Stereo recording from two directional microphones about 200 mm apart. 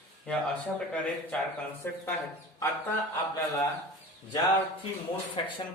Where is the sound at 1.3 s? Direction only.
5° left (ahead or behind).